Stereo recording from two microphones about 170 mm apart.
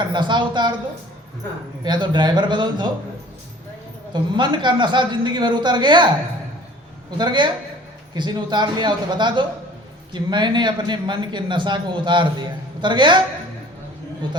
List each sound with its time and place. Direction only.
0.0 s a man's voice: 25° right (ahead or behind)
1.8 s a man's voice: 25° right (ahead or behind)
4.1 s a man's voice: 25° right (ahead or behind)
7.2 s a man's voice: 25° right (ahead or behind)